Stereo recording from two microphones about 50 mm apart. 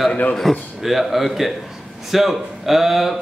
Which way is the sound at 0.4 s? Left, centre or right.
Centre.